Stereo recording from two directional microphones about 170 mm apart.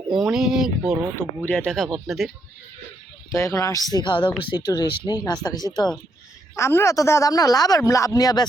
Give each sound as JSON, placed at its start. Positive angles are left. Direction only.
{"t": 0.1, "sound": "speech", "side_deg": -5}
{"t": 1.4, "sound": "speech", "side_deg": 5}
{"t": 3.3, "sound": "speech", "side_deg": 20}